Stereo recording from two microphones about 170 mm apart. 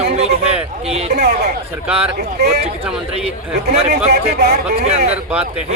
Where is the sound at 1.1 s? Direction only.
75° right (ahead or behind).